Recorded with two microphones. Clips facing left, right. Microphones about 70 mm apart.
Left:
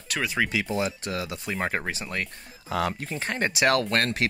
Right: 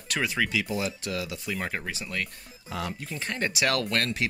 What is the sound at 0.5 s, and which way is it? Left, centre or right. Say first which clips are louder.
Speech: left 2 dB; left.